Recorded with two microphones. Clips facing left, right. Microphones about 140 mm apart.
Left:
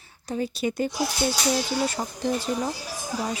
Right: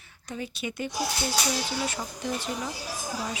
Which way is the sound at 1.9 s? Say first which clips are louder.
Left 5 dB; 35° left (ahead or behind).